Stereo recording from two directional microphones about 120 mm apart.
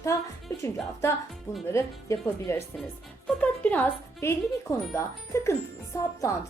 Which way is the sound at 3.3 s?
10° left (ahead or behind).